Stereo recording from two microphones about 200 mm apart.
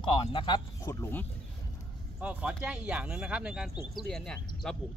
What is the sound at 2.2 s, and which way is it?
Speech, 5° right (ahead or behind).